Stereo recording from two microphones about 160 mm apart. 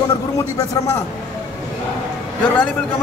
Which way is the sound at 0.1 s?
20° left (ahead or behind).